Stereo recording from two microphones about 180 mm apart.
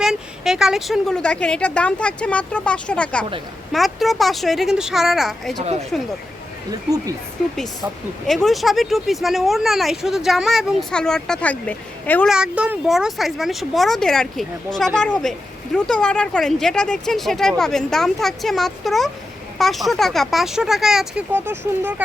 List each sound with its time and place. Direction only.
0.0 s speech: 5° right (ahead or behind)
8.3 s speech: centre (ahead or behind)
12.3 s speech: 5° right (ahead or behind)